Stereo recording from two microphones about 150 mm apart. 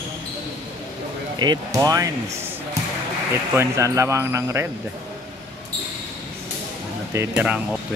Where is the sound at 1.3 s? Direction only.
30° right (ahead or behind).